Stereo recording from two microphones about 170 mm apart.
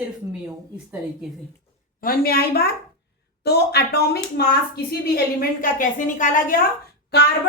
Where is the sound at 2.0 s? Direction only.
60° left (ahead or behind).